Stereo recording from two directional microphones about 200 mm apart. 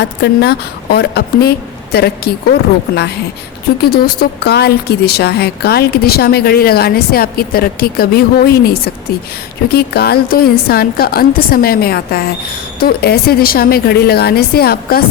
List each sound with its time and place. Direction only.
0.0 s a woman's voice: 55° left (ahead or behind)